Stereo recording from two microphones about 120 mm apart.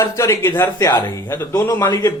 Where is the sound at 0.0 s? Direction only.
25° left (ahead or behind).